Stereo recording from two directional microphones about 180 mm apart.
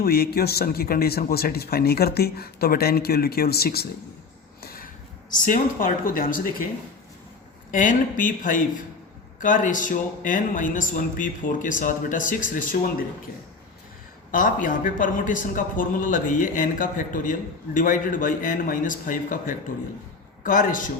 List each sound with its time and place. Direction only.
0.0 s speech: 60° left (ahead or behind)
4.6 s a sound: 55° left (ahead or behind)
5.3 s speech: 50° left (ahead or behind)
7.7 s speech: 45° left (ahead or behind)
14.3 s speech: 50° left (ahead or behind)